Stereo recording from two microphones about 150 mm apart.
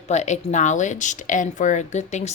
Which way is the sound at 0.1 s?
50° left (ahead or behind).